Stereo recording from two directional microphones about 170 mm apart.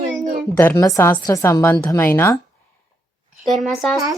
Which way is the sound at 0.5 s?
15° left (ahead or behind).